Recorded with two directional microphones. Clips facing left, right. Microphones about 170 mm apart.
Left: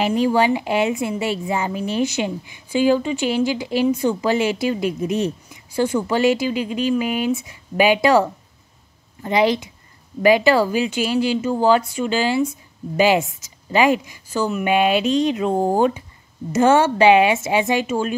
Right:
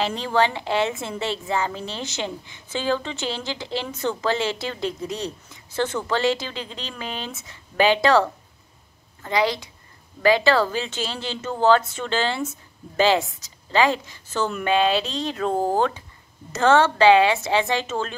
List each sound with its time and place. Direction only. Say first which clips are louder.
0.0 s a woman's voice: left 5 dB; 15° left (ahead or behind)